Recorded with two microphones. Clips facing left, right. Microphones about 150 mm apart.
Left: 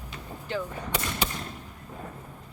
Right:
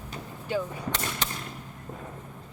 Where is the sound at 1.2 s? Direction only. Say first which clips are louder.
Left 3 dB; 10° left (ahead or behind).